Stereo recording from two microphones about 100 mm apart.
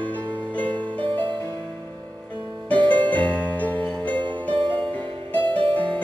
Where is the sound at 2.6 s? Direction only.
15° left (ahead or behind).